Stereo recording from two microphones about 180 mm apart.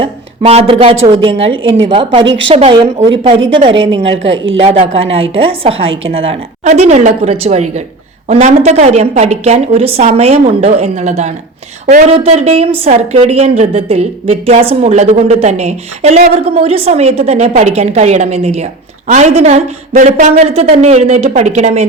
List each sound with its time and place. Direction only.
0.0 s a woman's voice: 30° right (ahead or behind)